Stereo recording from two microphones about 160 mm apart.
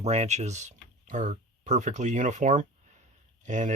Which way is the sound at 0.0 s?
45° right (ahead or behind).